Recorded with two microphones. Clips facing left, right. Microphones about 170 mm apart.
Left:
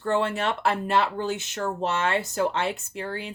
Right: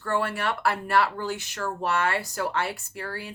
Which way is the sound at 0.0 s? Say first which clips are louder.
Left 3 dB; 20° left (ahead or behind).